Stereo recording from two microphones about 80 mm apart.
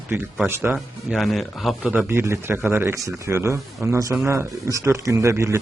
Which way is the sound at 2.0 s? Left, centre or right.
Right.